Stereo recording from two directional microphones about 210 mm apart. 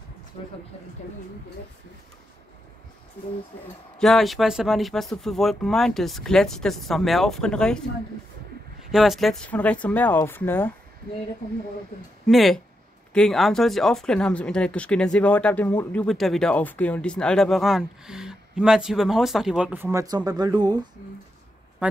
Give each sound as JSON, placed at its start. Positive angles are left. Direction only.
{"t": 0.3, "sound": "speech", "side_deg": 30}
{"t": 4.0, "sound": "speech", "side_deg": 0}
{"t": 8.9, "sound": "speech", "side_deg": 0}
{"t": 12.3, "sound": "speech", "side_deg": 0}